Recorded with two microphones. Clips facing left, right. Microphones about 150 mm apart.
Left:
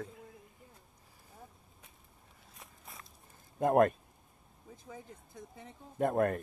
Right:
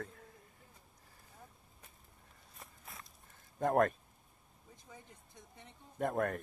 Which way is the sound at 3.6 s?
20° left (ahead or behind).